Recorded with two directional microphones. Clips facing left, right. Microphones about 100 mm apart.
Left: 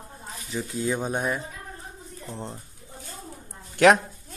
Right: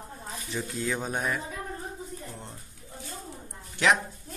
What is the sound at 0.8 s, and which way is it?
Speech, 20° left (ahead or behind).